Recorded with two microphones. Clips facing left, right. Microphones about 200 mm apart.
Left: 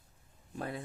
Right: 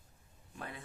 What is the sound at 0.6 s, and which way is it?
Speech, 35° left (ahead or behind).